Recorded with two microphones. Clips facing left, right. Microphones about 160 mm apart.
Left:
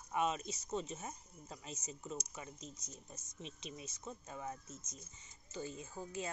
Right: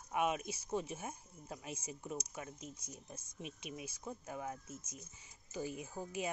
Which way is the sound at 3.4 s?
10° right (ahead or behind).